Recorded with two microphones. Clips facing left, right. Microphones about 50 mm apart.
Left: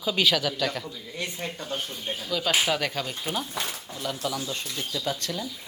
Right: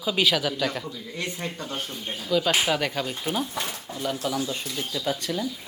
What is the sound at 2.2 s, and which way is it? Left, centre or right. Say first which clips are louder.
A man's voice: right 3 dB; centre.